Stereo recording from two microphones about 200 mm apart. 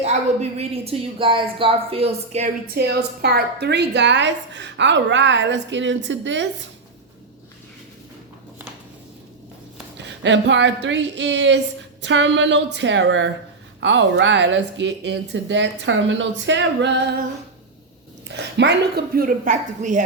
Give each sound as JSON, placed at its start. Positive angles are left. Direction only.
{"t": 0.0, "sound": "a woman's voice", "side_deg": -30}
{"t": 2.7, "sound": "a woman's voice", "side_deg": -55}
{"t": 10.0, "sound": "a woman's voice", "side_deg": -65}
{"t": 18.3, "sound": "a woman's voice", "side_deg": -60}